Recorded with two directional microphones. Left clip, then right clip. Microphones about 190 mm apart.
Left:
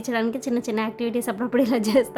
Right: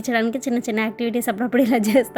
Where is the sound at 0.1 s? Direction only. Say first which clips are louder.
Right 3 dB; 15° right (ahead or behind).